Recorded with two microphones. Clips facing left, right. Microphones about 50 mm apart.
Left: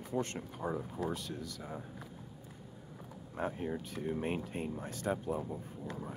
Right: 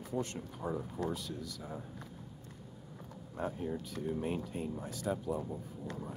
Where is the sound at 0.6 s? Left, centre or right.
Centre.